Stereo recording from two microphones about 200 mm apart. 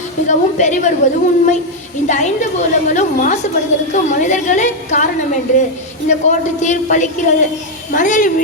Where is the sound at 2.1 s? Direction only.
35° left (ahead or behind).